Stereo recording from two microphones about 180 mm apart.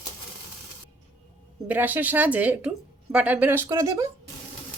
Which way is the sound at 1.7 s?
10° right (ahead or behind).